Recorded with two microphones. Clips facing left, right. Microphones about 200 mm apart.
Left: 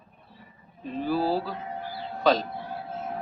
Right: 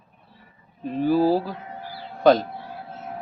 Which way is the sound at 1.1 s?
50° right (ahead or behind).